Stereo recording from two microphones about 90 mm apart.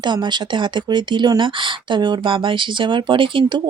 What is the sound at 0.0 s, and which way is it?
Speech, 55° right (ahead or behind).